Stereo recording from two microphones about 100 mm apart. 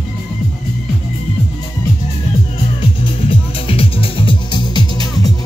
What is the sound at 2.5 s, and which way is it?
Music, 65° left (ahead or behind).